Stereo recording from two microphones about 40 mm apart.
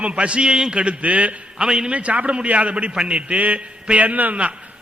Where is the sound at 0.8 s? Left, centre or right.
Right.